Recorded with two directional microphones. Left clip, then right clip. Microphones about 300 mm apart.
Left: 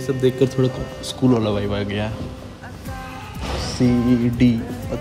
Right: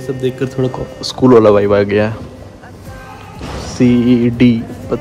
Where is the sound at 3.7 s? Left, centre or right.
Right.